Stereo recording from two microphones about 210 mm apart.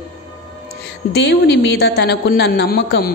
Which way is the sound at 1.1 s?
55° left (ahead or behind).